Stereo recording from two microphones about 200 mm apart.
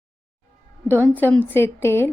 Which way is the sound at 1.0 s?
10° left (ahead or behind).